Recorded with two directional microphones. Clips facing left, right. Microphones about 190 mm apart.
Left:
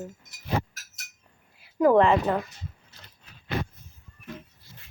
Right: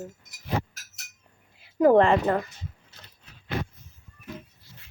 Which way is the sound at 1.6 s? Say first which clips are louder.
Right 1 dB; 30° right (ahead or behind).